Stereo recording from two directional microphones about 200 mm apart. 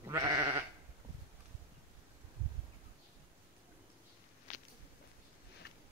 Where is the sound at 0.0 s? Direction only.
15° right (ahead or behind).